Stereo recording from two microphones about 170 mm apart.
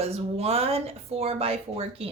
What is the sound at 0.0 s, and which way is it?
A woman's voice, 35° right (ahead or behind).